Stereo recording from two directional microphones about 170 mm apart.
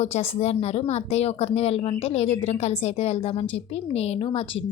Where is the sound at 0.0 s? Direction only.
40° left (ahead or behind).